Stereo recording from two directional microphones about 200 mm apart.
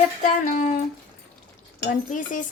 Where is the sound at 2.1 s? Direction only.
40° left (ahead or behind).